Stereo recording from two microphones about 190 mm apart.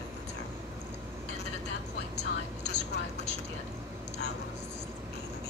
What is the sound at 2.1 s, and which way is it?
Whispering, 65° left (ahead or behind).